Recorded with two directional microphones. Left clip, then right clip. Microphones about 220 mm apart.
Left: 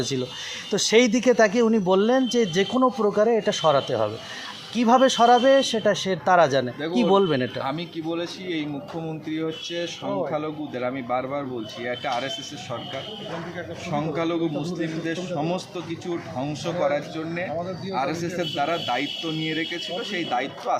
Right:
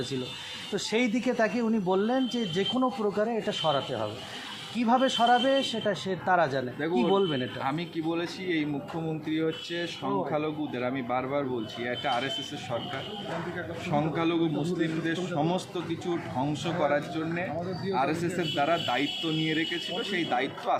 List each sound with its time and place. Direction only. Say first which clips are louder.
0.7 s speech: left 10 dB; 45° left (ahead or behind)
7.6 s a man's voice: left 2 dB; centre (ahead or behind)
13.9 s a man's voice: left 2 dB; centre (ahead or behind)